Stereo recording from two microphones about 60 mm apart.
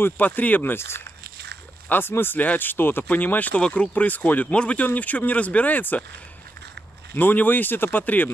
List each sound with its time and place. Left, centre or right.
0.0 s speech: left
0.7 s speech: left
3.6 s speech: centre
3.9 s speech: left
7.2 s speech: left